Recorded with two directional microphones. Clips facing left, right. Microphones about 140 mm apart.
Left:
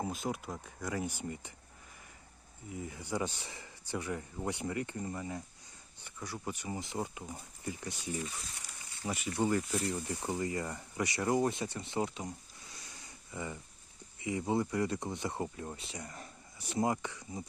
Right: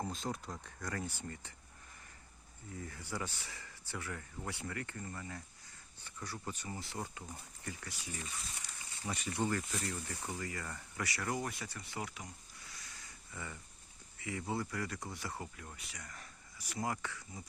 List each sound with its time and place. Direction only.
0.0 s speech: 10° left (ahead or behind)
2.7 s speech: 15° left (ahead or behind)
9.7 s speech: 20° left (ahead or behind)
12.7 s a sound: 20° left (ahead or behind)
14.2 s speech: 20° left (ahead or behind)